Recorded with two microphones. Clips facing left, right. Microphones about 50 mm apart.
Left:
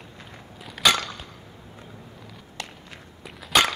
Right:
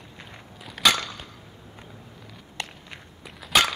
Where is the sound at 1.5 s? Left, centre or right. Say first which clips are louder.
Left 1 dB; centre.